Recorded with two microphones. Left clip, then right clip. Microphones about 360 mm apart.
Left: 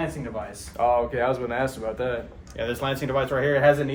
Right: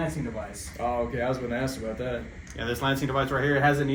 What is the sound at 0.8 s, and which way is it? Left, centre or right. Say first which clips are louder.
Speech: left 6 dB; left.